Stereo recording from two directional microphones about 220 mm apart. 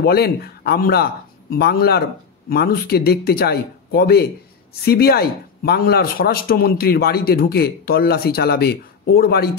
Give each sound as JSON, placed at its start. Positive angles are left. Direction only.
{"t": 0.0, "sound": "speech", "side_deg": 45}